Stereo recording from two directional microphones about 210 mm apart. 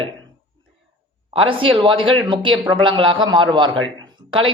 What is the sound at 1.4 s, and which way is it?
Speech, 25° right (ahead or behind).